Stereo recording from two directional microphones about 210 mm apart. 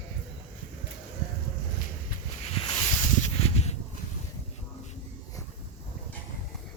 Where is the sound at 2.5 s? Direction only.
25° left (ahead or behind).